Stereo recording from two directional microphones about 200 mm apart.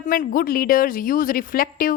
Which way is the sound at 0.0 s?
40° left (ahead or behind).